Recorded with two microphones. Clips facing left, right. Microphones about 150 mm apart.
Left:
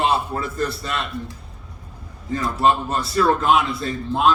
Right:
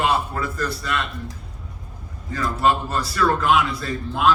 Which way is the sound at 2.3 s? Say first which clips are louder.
Left 2 dB; 25° left (ahead or behind).